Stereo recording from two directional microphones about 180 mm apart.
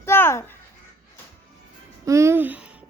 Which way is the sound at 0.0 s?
15° left (ahead or behind).